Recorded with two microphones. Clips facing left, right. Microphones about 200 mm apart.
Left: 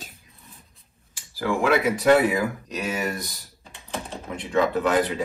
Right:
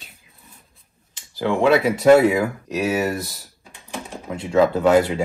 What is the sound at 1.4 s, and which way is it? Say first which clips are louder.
Speech: right 5 dB; 25° right (ahead or behind).